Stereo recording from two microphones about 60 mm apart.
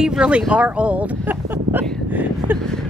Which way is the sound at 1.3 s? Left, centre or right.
Right.